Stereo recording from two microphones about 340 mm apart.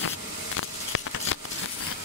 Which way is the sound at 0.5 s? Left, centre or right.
Left.